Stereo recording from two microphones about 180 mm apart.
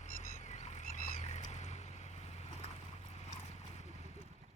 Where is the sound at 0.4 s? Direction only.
40° left (ahead or behind).